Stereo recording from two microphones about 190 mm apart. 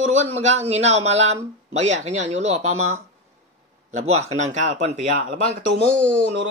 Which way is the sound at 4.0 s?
35° right (ahead or behind).